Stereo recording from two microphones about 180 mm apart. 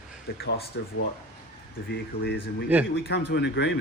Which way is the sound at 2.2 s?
65° left (ahead or behind).